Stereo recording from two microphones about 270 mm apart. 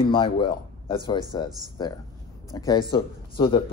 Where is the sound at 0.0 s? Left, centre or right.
Centre.